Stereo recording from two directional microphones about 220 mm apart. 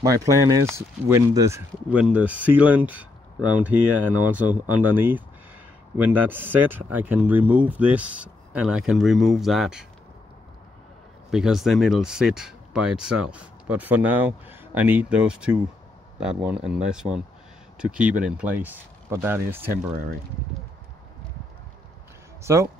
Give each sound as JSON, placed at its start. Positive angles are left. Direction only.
{"t": 0.0, "sound": "speech", "side_deg": -15}
{"t": 11.2, "sound": "speech", "side_deg": -5}
{"t": 19.7, "sound": "speech", "side_deg": -40}
{"t": 22.4, "sound": "speech", "side_deg": -10}